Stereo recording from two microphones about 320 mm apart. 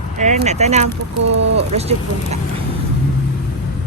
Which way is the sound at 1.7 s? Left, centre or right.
Centre.